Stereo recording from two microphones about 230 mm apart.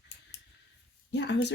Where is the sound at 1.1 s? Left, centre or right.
Left.